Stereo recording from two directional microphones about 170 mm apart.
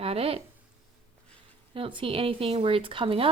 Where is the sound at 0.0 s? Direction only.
35° right (ahead or behind).